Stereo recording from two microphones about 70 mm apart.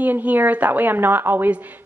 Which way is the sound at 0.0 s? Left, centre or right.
Right.